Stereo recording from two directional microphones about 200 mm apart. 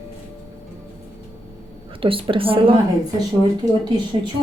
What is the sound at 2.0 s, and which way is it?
Speech, 25° right (ahead or behind).